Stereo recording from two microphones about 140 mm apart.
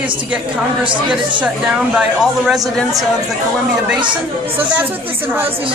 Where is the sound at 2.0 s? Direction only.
5° right (ahead or behind).